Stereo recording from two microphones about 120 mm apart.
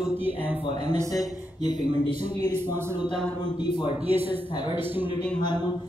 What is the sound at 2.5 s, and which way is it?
Speech, 20° right (ahead or behind).